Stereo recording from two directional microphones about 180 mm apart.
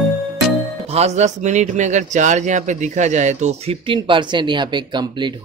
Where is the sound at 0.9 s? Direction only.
35° right (ahead or behind).